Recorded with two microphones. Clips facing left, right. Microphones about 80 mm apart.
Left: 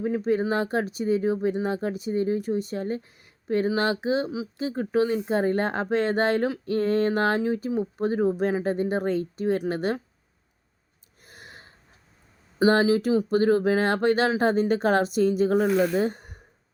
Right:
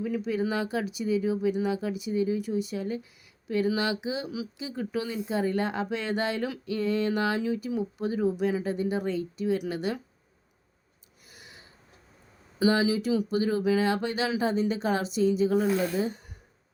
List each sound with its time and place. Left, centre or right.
0.0 s speech: left
11.3 s gasp: left
12.6 s speech: left